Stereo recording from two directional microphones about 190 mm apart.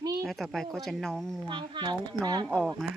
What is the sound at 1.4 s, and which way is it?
A woman's voice, 25° right (ahead or behind).